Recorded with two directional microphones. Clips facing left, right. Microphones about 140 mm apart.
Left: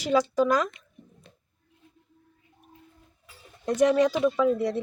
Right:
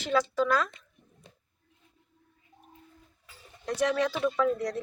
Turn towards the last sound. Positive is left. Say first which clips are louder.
# left 4 dB
turn(degrees=5)  # may be behind; listen again after turning